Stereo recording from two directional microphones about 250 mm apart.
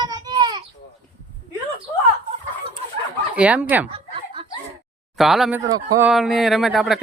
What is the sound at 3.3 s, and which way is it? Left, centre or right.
Speech, centre.